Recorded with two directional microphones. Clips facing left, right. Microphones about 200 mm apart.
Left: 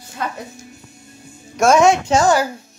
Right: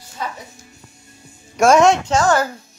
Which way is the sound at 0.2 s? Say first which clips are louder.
Left 2 dB; 60° left (ahead or behind).